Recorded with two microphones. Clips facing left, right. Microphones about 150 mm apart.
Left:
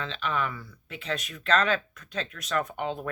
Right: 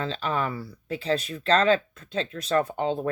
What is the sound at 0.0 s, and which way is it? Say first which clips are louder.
Speech: right 3 dB; 35° right (ahead or behind).